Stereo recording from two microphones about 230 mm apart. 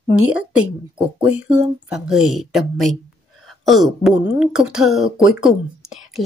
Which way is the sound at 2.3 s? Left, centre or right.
Centre.